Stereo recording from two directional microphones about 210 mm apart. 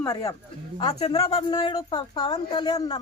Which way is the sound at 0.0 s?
15° left (ahead or behind).